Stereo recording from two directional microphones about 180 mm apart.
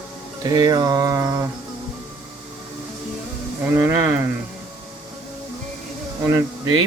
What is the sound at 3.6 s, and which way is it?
Speech, 10° right (ahead or behind).